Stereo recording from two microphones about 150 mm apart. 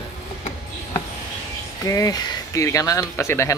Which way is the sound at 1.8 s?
25° left (ahead or behind).